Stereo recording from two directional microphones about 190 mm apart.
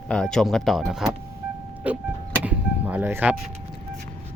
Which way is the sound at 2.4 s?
10° right (ahead or behind).